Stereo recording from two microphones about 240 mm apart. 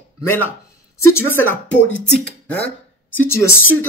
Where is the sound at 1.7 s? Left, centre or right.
Left.